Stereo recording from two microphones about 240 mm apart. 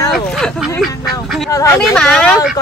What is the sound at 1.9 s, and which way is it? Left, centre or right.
Speech, centre.